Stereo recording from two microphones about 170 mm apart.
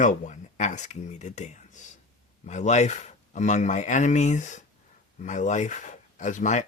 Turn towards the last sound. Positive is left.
turn(degrees=45)  # may be behind; listen again after turning